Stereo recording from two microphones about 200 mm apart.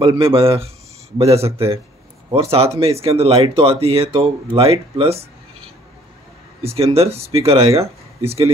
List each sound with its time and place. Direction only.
0.0 s speech: 25° right (ahead or behind)
6.6 s speech: 30° right (ahead or behind)